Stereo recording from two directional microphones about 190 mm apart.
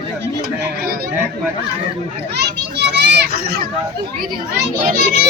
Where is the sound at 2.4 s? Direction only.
60° right (ahead or behind).